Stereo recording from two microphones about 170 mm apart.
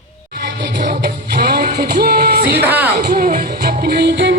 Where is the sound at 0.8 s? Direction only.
80° right.